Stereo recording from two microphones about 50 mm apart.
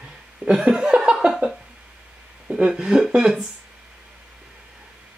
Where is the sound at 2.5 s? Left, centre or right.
Centre.